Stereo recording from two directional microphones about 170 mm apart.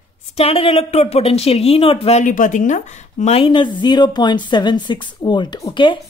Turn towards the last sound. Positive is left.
turn(degrees=30)  # may be behind; listen again after turning